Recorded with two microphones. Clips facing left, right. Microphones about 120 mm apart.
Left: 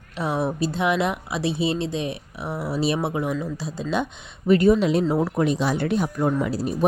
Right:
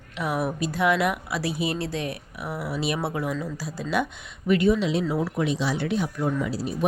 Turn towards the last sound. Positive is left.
turn(degrees=50)  # may be behind; listen again after turning